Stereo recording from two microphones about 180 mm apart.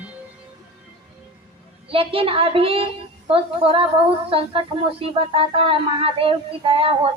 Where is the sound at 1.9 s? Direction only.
30° right (ahead or behind).